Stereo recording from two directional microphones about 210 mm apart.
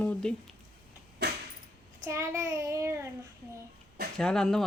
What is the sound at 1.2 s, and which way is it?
Keys jangling, 55° right (ahead or behind).